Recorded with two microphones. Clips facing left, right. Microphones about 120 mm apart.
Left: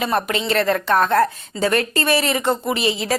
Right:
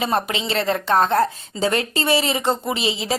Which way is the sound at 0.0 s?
25° right (ahead or behind).